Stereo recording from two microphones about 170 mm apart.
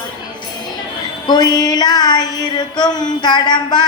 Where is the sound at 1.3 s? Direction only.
25° left (ahead or behind).